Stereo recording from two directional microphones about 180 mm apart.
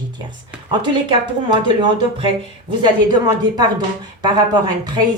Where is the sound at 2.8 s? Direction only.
20° right (ahead or behind).